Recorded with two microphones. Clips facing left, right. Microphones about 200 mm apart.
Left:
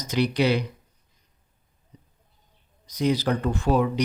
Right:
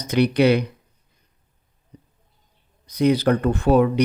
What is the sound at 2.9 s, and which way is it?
Speech, 60° right (ahead or behind).